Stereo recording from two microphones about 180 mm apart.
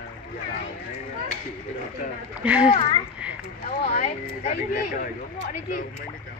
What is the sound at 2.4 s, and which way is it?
Speech, 5° right (ahead or behind).